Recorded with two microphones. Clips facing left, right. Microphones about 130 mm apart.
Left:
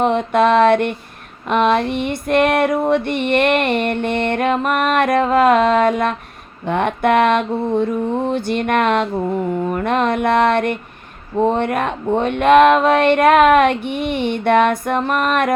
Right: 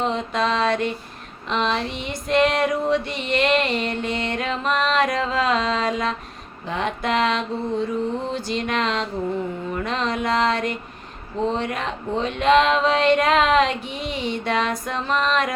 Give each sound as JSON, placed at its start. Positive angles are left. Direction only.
{"t": 0.0, "sound": "female singing", "side_deg": 60}